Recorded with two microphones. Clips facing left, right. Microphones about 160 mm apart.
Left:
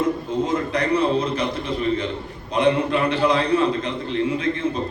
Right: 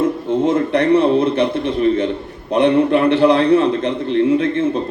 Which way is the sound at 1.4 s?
60° right (ahead or behind).